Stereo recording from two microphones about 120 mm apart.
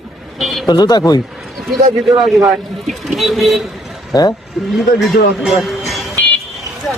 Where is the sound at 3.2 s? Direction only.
Centre (ahead or behind).